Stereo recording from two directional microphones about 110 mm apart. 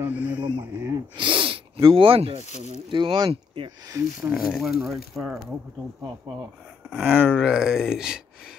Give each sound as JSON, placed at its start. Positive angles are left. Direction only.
{"t": 0.0, "sound": "speech", "side_deg": -15}
{"t": 0.6, "sound": "speech", "side_deg": -25}
{"t": 1.1, "sound": "speech", "side_deg": -45}
{"t": 2.4, "sound": "speech", "side_deg": 85}
{"t": 2.9, "sound": "speech", "side_deg": -45}
{"t": 4.4, "sound": "speech", "side_deg": 0}
{"t": 6.9, "sound": "speech", "side_deg": -5}